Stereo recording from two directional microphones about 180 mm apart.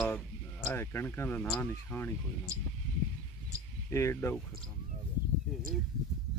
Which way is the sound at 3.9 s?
15° left (ahead or behind).